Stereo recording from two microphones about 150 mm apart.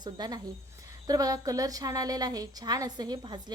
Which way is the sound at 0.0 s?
30° right (ahead or behind).